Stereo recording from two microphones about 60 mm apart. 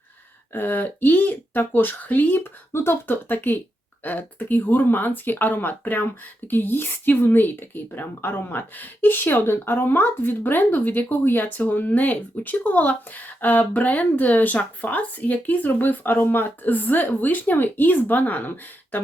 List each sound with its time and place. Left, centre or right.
0.5 s speech: left